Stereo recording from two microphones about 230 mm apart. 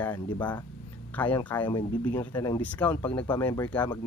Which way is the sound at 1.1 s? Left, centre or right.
Centre.